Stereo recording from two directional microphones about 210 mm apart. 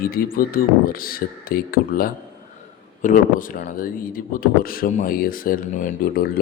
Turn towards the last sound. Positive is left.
turn(degrees=45)  # may be behind; listen again after turning